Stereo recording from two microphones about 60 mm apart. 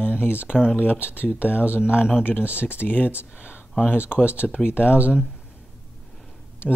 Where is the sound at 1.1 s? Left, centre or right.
Left.